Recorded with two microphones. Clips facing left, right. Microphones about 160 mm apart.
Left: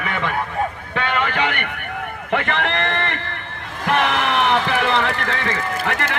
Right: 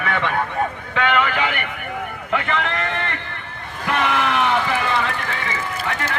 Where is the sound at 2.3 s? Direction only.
65° left (ahead or behind).